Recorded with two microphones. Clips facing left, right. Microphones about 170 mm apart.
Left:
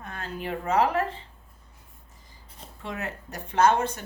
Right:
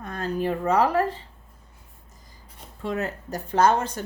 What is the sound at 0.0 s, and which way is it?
Speech, 40° right (ahead or behind).